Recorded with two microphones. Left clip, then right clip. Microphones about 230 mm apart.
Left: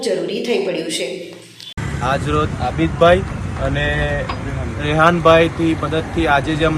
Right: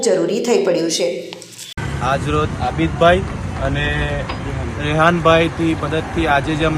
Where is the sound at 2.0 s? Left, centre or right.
Centre.